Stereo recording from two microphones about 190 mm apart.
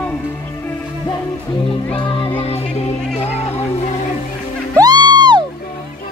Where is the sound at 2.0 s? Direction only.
25° left (ahead or behind).